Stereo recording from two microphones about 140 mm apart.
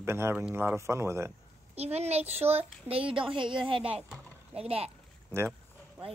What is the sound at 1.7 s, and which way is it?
A child's voice, 50° right (ahead or behind).